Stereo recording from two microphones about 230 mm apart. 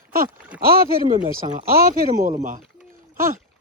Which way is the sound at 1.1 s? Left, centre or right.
Right.